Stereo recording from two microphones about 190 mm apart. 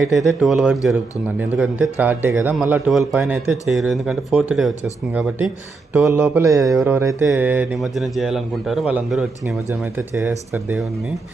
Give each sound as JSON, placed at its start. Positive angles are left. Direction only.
{"t": 0.1, "sound": "a man's voice", "side_deg": 0}
{"t": 6.1, "sound": "a man's voice", "side_deg": -10}
{"t": 10.2, "sound": "speech", "side_deg": -10}